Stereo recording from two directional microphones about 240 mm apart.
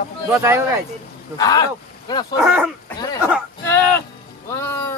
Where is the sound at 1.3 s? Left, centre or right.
Centre.